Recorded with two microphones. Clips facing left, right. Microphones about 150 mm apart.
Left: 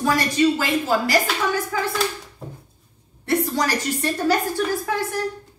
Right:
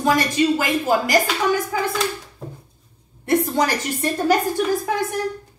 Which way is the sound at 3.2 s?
20° right (ahead or behind).